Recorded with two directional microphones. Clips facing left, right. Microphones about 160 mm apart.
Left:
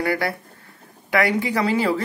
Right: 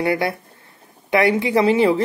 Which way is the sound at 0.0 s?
20° right (ahead or behind).